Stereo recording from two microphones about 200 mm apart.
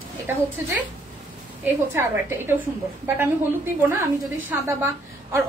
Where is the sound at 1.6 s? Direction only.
10° right (ahead or behind).